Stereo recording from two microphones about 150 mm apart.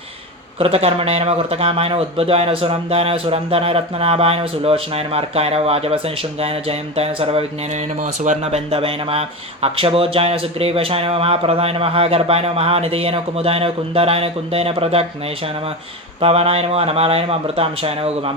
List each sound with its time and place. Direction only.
0.6 s speech: 40° right (ahead or behind)
16.2 s speech: 40° right (ahead or behind)